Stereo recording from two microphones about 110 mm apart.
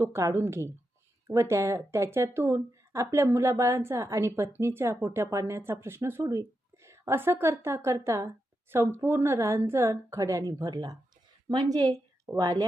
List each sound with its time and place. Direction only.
0.0 s a woman's voice: 30° right (ahead or behind)